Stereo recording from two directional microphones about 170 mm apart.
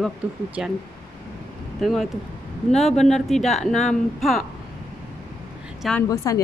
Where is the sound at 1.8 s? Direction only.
Centre (ahead or behind).